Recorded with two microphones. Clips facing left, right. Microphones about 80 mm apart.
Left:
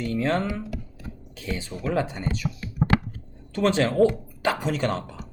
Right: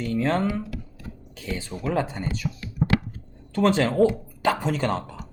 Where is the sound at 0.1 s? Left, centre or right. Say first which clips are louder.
Right 1 dB; right.